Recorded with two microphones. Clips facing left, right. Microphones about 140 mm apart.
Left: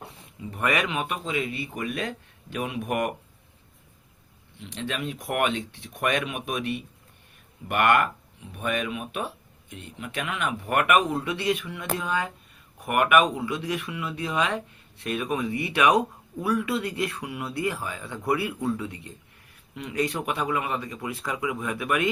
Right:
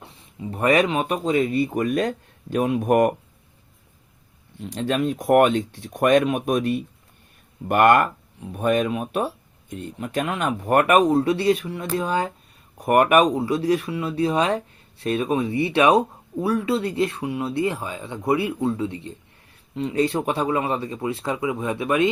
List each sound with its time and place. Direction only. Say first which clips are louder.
0.4 s speech: right 7 dB; 30° right (ahead or behind)
4.6 s speech: right 9 dB; 40° right (ahead or behind); by 22.1 s 25° right (ahead or behind)